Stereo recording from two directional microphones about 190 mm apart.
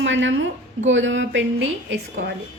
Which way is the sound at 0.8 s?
80° right.